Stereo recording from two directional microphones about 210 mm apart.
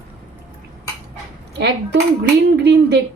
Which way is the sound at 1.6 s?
55° right (ahead or behind).